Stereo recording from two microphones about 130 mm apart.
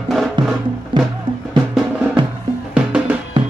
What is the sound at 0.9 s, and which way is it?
Music, 40° right (ahead or behind).